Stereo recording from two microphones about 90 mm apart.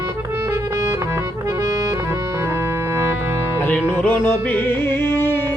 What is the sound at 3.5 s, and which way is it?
Music, 20° left (ahead or behind).